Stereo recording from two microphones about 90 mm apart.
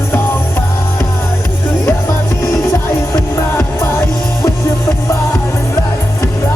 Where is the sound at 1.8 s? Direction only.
35° left (ahead or behind).